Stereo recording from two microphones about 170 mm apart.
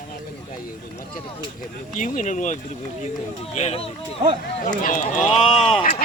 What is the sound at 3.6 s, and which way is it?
Speech, 40° left (ahead or behind).